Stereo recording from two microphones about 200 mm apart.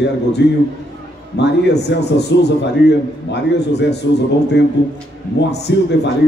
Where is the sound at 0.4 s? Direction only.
55° left (ahead or behind).